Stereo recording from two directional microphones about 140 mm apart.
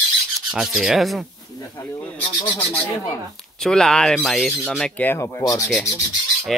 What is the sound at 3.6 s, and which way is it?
Speech, 5° left (ahead or behind).